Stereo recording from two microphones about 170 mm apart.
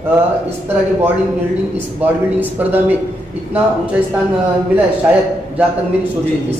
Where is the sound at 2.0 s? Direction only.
10° right (ahead or behind).